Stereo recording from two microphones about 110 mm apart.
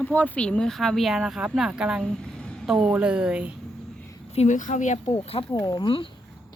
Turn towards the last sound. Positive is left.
turn(degrees=45)  # may be behind; listen again after turning